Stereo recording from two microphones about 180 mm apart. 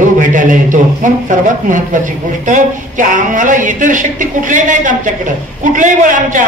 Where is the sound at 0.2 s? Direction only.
45° right (ahead or behind).